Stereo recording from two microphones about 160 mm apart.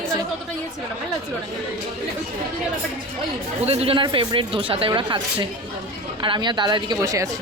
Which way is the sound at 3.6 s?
40° right (ahead or behind).